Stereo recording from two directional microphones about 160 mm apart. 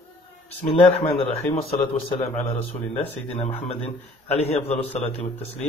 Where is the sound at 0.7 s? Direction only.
40° left (ahead or behind).